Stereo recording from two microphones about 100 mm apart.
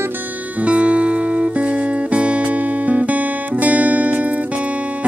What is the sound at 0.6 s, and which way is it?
Music, 15° right (ahead or behind).